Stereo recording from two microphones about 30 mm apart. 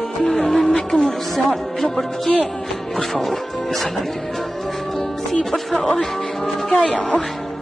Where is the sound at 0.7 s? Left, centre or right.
Left.